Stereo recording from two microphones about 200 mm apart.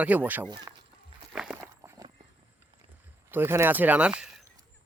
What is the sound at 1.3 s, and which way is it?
Walk, 5° right (ahead or behind).